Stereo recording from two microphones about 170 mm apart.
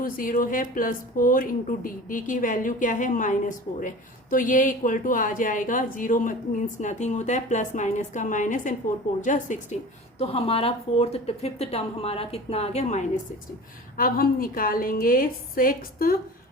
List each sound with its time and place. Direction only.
0.0 s speech: 55° left (ahead or behind)
10.2 s speech: 35° left (ahead or behind)
13.9 s speech: 55° left (ahead or behind)